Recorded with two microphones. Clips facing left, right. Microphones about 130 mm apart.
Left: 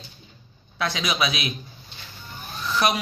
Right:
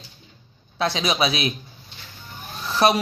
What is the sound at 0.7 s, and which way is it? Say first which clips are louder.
Speech: right 3 dB; 30° right (ahead or behind).